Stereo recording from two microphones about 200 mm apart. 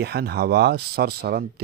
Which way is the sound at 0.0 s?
55° right (ahead or behind).